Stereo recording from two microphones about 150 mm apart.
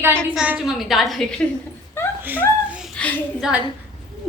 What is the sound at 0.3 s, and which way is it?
Child singing, 5° right (ahead or behind).